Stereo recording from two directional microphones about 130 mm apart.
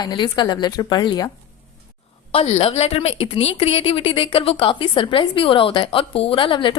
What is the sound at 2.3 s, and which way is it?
A woman's voice, 50° left (ahead or behind).